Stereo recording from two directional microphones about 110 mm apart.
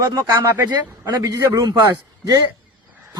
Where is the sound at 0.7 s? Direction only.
40° right (ahead or behind).